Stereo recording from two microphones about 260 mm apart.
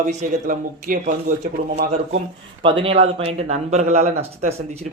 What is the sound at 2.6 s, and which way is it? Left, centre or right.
Speech, centre.